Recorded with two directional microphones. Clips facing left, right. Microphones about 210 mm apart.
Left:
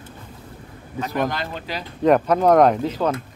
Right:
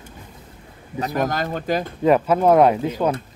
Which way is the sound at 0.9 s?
40° right (ahead or behind).